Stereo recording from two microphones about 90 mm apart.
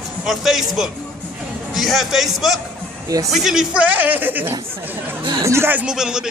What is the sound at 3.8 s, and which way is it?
A woman's voice, 20° right (ahead or behind).